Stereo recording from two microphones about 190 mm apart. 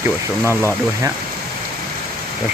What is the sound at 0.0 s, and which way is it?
Speech, 15° right (ahead or behind).